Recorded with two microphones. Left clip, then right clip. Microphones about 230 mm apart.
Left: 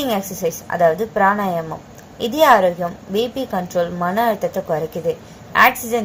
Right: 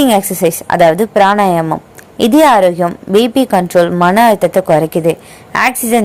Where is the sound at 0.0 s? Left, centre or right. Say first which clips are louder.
Right 10 dB; right.